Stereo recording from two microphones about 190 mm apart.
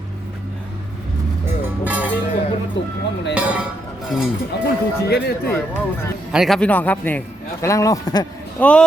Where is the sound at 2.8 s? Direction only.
70° left (ahead or behind).